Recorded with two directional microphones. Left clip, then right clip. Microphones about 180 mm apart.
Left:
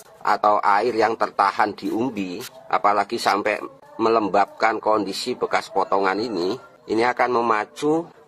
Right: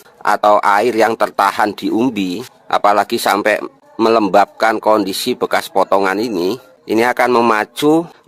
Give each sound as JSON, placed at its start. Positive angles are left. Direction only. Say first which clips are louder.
{"t": 0.2, "sound": "speech", "louder": "right 7 dB", "side_deg": -55}